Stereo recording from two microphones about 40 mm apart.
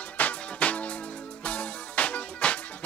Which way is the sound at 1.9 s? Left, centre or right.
Left.